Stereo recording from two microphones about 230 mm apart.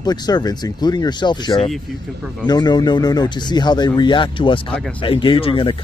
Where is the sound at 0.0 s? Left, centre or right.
Centre.